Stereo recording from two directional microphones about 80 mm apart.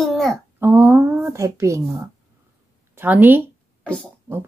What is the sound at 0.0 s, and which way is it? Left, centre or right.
Babbling, centre.